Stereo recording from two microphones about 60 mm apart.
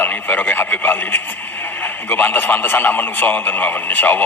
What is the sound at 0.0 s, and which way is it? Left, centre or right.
Speech, left.